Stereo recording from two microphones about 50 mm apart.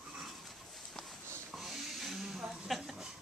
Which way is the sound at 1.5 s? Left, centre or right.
Centre.